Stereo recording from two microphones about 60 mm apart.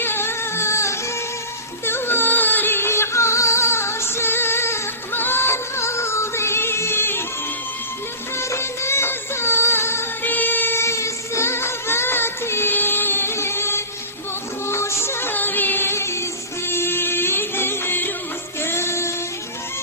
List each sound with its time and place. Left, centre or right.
0.0 s music: left
8.4 s music: left
10.2 s music: left
10.8 s music: left